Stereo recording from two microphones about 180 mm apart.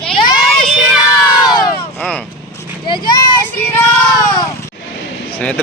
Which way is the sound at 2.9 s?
25° left (ahead or behind).